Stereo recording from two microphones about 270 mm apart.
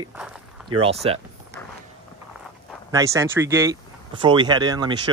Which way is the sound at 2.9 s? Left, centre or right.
Centre.